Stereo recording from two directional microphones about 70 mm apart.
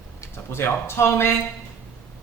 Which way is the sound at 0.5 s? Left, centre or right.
Left.